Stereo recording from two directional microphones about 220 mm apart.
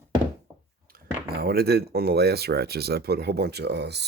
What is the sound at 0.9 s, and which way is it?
Speech, 45° right (ahead or behind).